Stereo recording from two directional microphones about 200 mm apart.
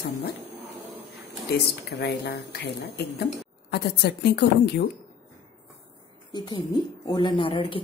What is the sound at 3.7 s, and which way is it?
A woman's voice, 55° left (ahead or behind).